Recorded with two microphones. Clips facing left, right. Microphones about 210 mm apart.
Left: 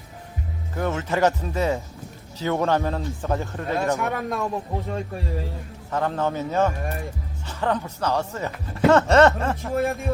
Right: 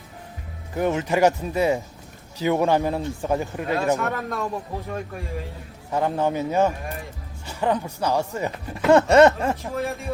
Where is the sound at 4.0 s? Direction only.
15° left (ahead or behind).